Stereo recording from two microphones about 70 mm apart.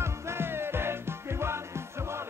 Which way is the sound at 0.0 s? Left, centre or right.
Right.